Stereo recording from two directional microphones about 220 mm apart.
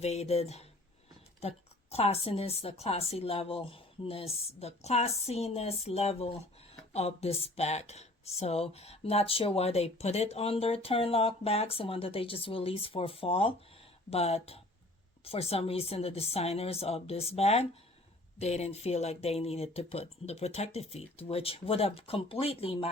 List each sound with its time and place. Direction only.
0.0 s speech: 30° left (ahead or behind)